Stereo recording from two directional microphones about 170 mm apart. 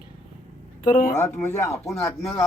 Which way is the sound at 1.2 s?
15° left (ahead or behind).